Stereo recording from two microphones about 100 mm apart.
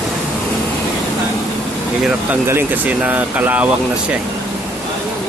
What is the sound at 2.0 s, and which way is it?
Speech, 10° right (ahead or behind).